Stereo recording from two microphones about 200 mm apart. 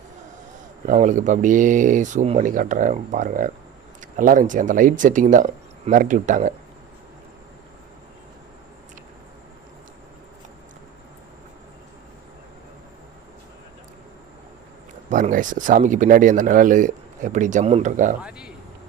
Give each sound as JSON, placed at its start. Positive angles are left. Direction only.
{"t": 0.9, "sound": "speech", "side_deg": -40}
{"t": 15.1, "sound": "speech", "side_deg": -40}
{"t": 18.2, "sound": "speech", "side_deg": -5}